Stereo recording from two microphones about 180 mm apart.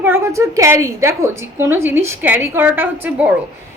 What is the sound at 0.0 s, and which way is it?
A woman's voice, 15° right (ahead or behind).